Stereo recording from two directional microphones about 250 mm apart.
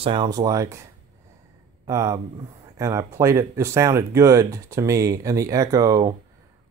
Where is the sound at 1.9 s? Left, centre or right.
Centre.